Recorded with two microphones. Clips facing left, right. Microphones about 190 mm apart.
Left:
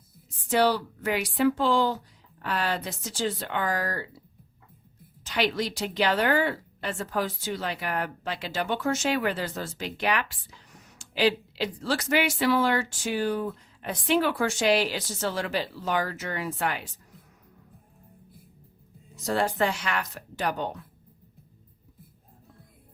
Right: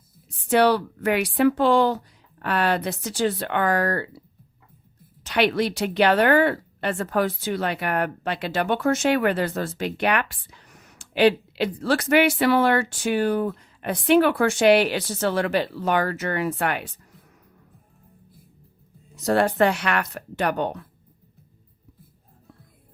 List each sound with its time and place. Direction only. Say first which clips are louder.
0.4 s speech: right 5 dB; 65° right (ahead or behind)
5.2 s speech: right 6 dB; 60° right (ahead or behind)
19.1 s speech: right 6 dB; 65° right (ahead or behind)